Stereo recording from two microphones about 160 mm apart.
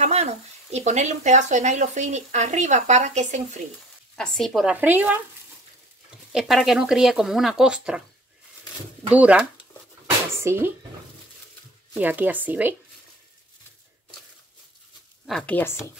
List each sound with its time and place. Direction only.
0.0 s speech: 40° right (ahead or behind)
4.2 s speech: 5° left (ahead or behind)
4.7 s speech: 10° right (ahead or behind)
6.3 s speech: 5° right (ahead or behind)
9.1 s speech: 10° right (ahead or behind)
12.0 s speech: 10° right (ahead or behind)
15.2 s speech: 5° left (ahead or behind)